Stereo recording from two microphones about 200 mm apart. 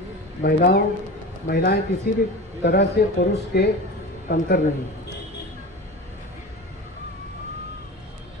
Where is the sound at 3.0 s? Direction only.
50° left (ahead or behind).